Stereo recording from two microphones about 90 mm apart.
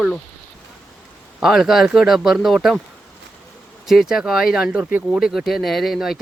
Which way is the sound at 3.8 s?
5° right (ahead or behind).